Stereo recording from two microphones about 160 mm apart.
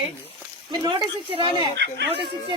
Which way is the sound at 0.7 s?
30° right (ahead or behind).